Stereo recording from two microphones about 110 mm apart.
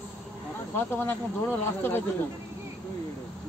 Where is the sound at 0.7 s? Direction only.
20° left (ahead or behind).